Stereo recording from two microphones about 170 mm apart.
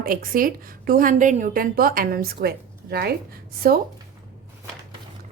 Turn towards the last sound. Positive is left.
turn(degrees=-60)  # may be behind; listen again after turning